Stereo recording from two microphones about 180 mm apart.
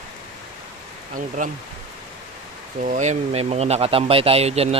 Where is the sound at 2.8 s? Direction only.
45° right (ahead or behind).